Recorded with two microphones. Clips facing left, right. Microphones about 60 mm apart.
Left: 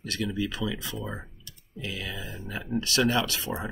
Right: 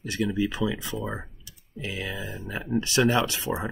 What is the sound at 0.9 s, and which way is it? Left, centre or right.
Speech, centre.